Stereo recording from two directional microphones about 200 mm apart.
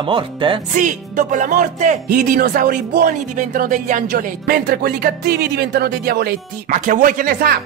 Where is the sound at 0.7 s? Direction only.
40° right (ahead or behind).